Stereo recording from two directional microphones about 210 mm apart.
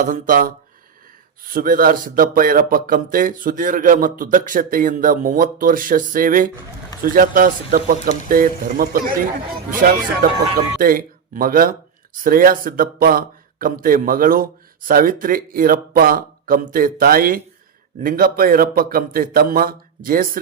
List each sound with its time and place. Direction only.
0.0 s speech: 40° right (ahead or behind)
10.8 s speech: 45° right (ahead or behind)